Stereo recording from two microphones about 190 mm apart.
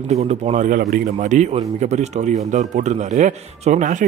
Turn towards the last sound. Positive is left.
turn(degrees=-40)  # may be behind; listen again after turning